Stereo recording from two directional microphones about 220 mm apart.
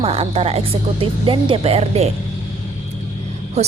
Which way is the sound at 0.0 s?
25° right (ahead or behind).